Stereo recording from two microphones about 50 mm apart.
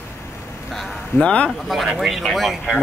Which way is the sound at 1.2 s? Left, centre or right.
Left.